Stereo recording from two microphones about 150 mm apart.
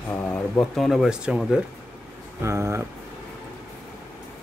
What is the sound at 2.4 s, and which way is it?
Speech, 20° right (ahead or behind).